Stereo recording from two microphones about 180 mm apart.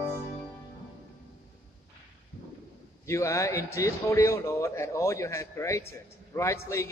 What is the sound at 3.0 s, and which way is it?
A man's voice, 15° left (ahead or behind).